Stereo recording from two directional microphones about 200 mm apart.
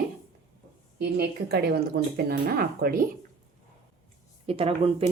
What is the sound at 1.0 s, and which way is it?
Speech, 55° right (ahead or behind).